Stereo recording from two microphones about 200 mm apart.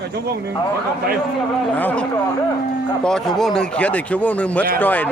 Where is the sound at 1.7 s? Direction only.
5° left (ahead or behind).